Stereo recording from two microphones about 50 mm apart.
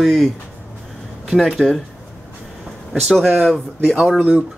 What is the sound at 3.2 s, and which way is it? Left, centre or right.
Speech, centre.